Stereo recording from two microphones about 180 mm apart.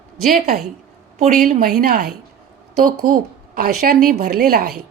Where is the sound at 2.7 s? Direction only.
55° right (ahead or behind).